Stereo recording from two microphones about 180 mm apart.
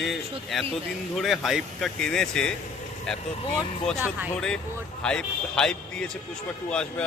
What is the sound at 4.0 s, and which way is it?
Speech, 10° right (ahead or behind).